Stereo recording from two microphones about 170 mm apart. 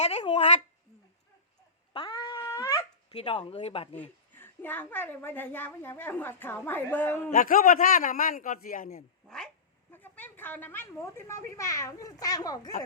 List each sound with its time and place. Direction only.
0.0 s speech: 40° left (ahead or behind)
1.9 s cat: 30° left (ahead or behind)
3.1 s speech: 30° left (ahead or behind)
4.4 s a woman's voice: 10° left (ahead or behind)
7.3 s a man's voice: 50° left (ahead or behind)
9.2 s a woman's voice: 5° left (ahead or behind); by 12.7 s 20° left (ahead or behind)